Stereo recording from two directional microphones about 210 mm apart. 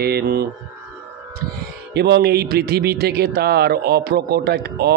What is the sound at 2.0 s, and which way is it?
A man's voice, 50° right (ahead or behind).